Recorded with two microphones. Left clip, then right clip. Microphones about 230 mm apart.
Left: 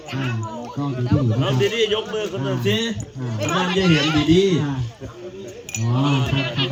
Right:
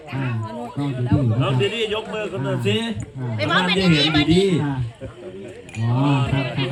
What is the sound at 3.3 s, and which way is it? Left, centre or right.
Speech, centre.